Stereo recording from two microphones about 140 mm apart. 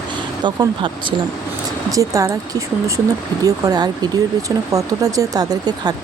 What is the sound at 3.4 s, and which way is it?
Speech, 25° right (ahead or behind).